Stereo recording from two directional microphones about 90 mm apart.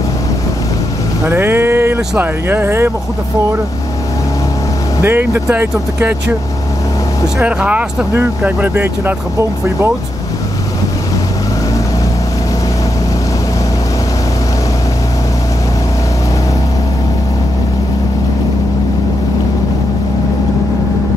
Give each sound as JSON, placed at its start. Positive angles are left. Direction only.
{"t": 1.2, "sound": "speech", "side_deg": -25}
{"t": 5.0, "sound": "speech", "side_deg": -20}
{"t": 7.4, "sound": "speech", "side_deg": -15}